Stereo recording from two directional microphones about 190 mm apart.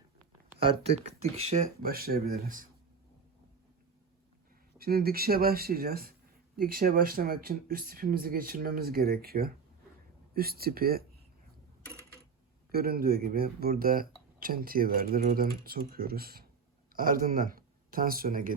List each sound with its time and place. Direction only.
0.6 s speech: 30° right (ahead or behind)
1.8 s speech: 50° right (ahead or behind)
4.8 s speech: 50° right (ahead or behind)
12.7 s speech: 50° right (ahead or behind)